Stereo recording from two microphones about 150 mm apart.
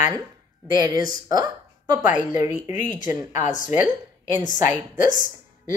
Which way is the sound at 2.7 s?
55° left (ahead or behind).